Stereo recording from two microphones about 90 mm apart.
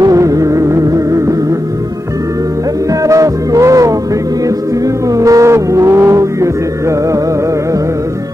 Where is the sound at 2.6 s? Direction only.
40° right (ahead or behind).